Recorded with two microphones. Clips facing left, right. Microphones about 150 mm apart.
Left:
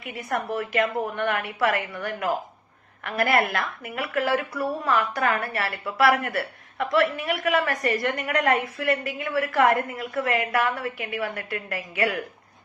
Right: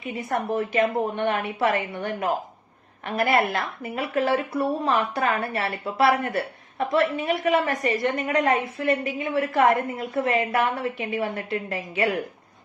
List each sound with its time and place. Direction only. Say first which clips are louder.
0.0 s speech: right 2 dB; 25° right (ahead or behind)